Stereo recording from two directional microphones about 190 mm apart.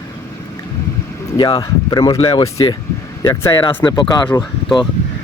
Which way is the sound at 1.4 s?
20° left (ahead or behind).